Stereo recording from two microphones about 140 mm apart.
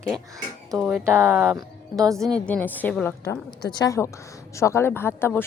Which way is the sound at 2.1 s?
5° left (ahead or behind).